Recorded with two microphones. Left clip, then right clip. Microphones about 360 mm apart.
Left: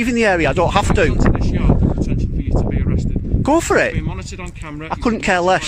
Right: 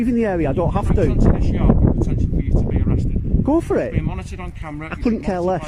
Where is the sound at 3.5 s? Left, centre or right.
Left.